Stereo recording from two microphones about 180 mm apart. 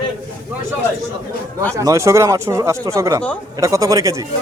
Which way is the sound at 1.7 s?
15° right (ahead or behind).